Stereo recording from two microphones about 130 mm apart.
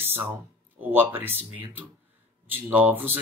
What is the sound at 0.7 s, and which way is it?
Speech, 15° right (ahead or behind).